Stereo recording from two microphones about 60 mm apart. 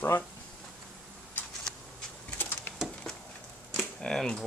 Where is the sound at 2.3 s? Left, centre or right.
Left.